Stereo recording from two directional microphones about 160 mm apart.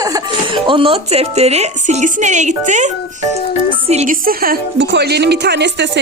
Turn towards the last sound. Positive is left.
turn(degrees=-90)